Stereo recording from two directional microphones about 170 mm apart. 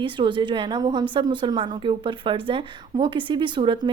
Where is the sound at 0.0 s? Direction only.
30° right (ahead or behind).